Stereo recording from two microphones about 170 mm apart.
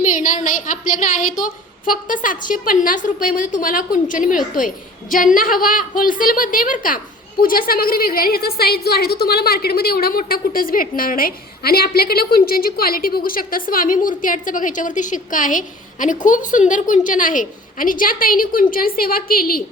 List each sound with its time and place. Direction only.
0.2 s a woman's voice: 50° left (ahead or behind)